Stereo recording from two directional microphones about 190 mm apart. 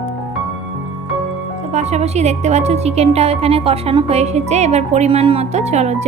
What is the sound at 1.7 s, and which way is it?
A woman's voice, 35° right (ahead or behind).